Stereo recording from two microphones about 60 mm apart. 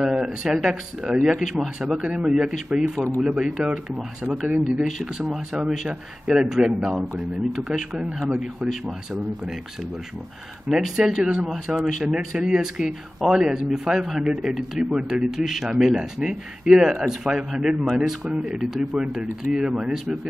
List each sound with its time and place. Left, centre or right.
0.0 s speech: centre
1.8 s speech: centre
4.5 s speech: right
4.8 s speech: centre
10.7 s speech: centre